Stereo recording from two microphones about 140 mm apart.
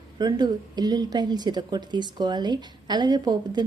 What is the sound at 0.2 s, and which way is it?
A woman's voice, 30° right (ahead or behind).